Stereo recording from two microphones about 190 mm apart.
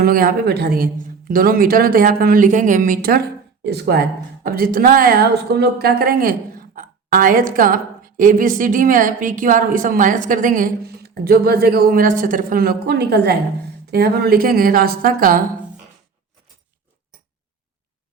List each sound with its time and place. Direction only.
0.0 s a woman's voice: 50° right (ahead or behind)
3.7 s a woman's voice: 60° right (ahead or behind)